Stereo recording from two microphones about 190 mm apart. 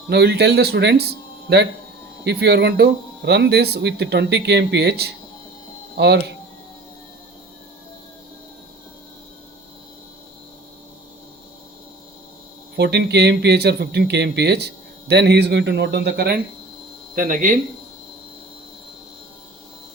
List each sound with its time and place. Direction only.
0.1 s speech: 60° right (ahead or behind)
12.7 s speech: 60° right (ahead or behind)
17.2 s speech: 45° right (ahead or behind)